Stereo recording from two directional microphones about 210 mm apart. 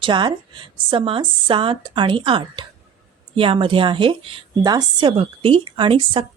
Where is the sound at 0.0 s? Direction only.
20° right (ahead or behind).